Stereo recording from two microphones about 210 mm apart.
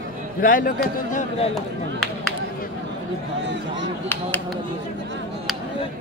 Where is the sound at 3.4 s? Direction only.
60° right (ahead or behind).